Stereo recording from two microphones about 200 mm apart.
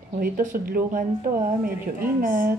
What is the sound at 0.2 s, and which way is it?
A woman's voice, 45° right (ahead or behind).